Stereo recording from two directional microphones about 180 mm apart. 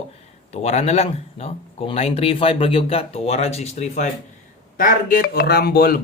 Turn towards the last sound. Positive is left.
turn(degrees=55)  # may be behind; listen again after turning